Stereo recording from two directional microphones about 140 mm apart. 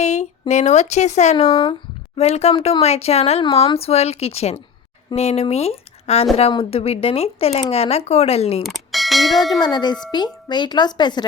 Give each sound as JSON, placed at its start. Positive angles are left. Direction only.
{"t": 0.0, "sound": "speech", "side_deg": 55}
{"t": 1.5, "sound": "speech", "side_deg": 25}
{"t": 2.1, "sound": "speech", "side_deg": 50}
{"t": 8.6, "sound": "speech", "side_deg": 0}
{"t": 9.6, "sound": "speech", "side_deg": 30}